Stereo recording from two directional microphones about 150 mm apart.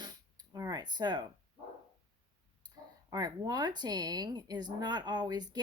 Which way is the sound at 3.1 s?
25° right (ahead or behind).